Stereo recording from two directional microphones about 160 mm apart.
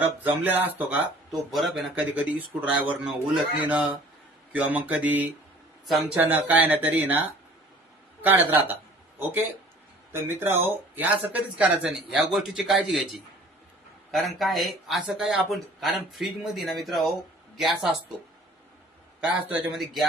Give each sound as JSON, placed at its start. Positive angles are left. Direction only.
{"t": 0.0, "sound": "speech", "side_deg": -10}
{"t": 8.2, "sound": "speech", "side_deg": -10}
{"t": 14.4, "sound": "speech", "side_deg": 0}
{"t": 19.7, "sound": "speech", "side_deg": 0}